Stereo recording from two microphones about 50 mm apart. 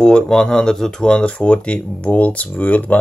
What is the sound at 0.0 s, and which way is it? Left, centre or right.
Speech, centre.